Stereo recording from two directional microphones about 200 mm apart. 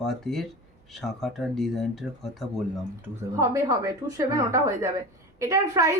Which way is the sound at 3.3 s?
15° right (ahead or behind).